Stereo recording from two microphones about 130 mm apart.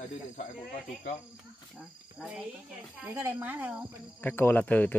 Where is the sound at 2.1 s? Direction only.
5° right (ahead or behind).